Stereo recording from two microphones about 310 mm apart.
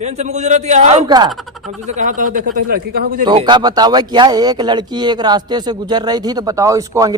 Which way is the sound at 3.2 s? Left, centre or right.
Centre.